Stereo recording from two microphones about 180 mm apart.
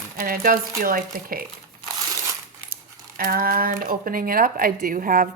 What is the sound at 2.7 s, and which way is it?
Speech, 55° right (ahead or behind).